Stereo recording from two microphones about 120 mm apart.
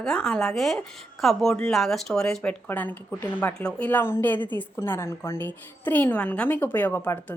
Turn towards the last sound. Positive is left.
turn(degrees=15)  # may be behind; listen again after turning